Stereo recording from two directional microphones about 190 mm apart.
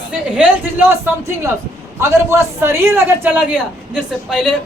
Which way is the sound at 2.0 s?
15° right (ahead or behind).